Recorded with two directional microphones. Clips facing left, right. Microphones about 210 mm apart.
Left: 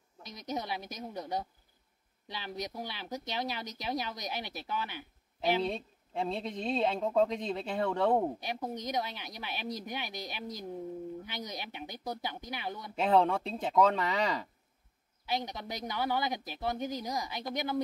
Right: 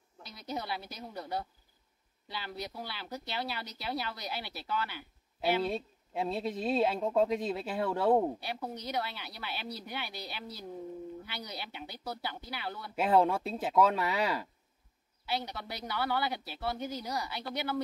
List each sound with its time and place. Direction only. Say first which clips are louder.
0.3 s speech: left 1 dB; 15° left (ahead or behind)
5.4 s speech: even; 5° right (ahead or behind)
8.4 s speech: left 2 dB; 15° left (ahead or behind)
12.9 s speech: even; 5° right (ahead or behind)
15.2 s speech: left 1 dB; 15° left (ahead or behind)